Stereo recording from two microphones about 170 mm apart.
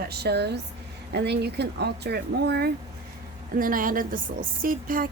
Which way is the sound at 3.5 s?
55° right (ahead or behind).